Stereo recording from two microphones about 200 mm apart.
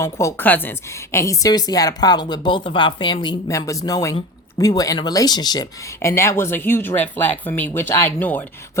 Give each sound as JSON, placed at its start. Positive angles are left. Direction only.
{"t": 0.0, "sound": "a woman's voice", "side_deg": 15}